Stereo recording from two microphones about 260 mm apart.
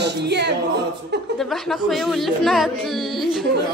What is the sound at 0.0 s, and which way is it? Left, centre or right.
Speech, right.